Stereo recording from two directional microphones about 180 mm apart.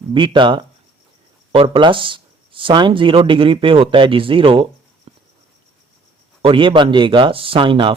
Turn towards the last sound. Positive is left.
turn(degrees=-25)  # may be behind; listen again after turning